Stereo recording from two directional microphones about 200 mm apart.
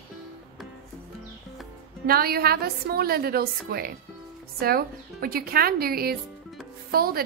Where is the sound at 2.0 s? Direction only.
50° right (ahead or behind).